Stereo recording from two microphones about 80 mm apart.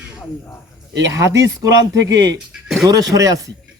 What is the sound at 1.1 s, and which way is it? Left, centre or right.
Speech, right.